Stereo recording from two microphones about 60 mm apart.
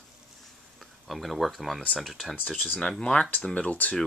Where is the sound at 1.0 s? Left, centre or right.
Centre.